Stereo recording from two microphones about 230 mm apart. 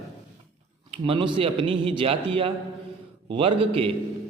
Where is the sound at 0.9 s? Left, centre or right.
Right.